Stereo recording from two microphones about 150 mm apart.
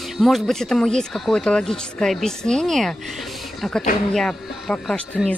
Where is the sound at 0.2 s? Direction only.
Centre (ahead or behind).